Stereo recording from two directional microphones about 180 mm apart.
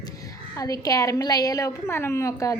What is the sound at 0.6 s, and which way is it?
A woman's voice, 20° left (ahead or behind).